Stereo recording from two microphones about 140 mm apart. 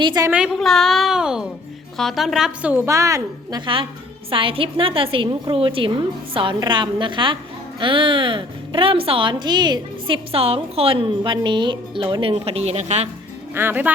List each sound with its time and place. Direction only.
0.0 s a woman's voice: 30° right (ahead or behind)
0.3 s a woman's voice: 5° right (ahead or behind)
2.8 s a woman's voice: 20° right (ahead or behind)
4.3 s a woman's voice: 40° right (ahead or behind)
13.5 s speech: 15° right (ahead or behind)